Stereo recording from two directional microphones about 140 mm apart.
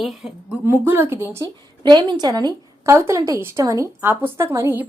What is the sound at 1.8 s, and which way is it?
A woman's voice, 35° right (ahead or behind).